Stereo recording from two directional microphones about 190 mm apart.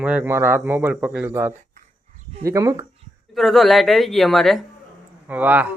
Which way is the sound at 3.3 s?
Centre (ahead or behind).